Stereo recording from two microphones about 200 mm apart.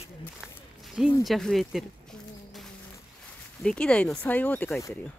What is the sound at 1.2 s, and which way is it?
Speech, centre (ahead or behind).